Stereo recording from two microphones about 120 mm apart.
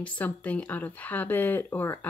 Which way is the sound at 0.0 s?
10° left (ahead or behind).